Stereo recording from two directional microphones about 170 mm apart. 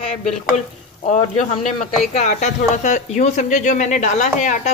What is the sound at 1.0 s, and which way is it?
Speech, 45° left (ahead or behind).